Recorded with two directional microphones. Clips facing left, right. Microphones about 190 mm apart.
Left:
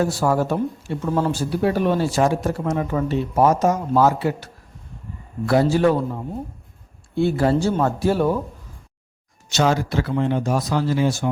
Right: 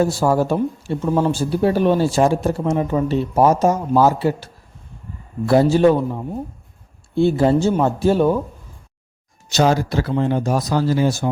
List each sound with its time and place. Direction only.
0.0 s speech: 25° right (ahead or behind)
1.0 s speech: 15° right (ahead or behind)
1.3 s speech: 25° right (ahead or behind)
5.5 s speech: 25° right (ahead or behind)
7.2 s speech: 25° right (ahead or behind)
9.5 s speech: 40° right (ahead or behind)